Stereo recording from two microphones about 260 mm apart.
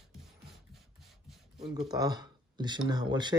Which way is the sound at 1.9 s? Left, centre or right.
Centre.